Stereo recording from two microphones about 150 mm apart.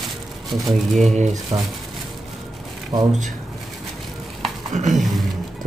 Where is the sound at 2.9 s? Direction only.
25° right (ahead or behind).